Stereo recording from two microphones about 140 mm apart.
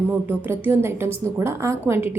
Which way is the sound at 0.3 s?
15° right (ahead or behind).